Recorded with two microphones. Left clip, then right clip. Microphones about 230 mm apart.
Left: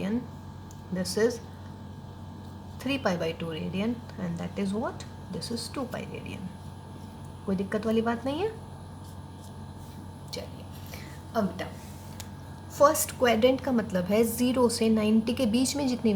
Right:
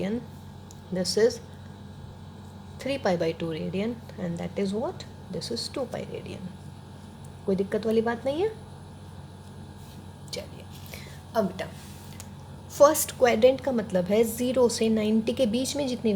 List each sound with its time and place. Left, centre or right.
0.9 s a woman's voice: right
2.8 s a woman's voice: right
7.5 s a woman's voice: right
10.3 s a sound: right
12.7 s a woman's voice: right; by 16.1 s centre